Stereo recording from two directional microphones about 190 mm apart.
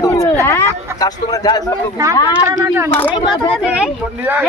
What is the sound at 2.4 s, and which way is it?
Speech, 15° right (ahead or behind).